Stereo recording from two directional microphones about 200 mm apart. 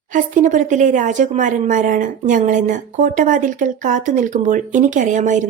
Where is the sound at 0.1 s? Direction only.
40° right (ahead or behind).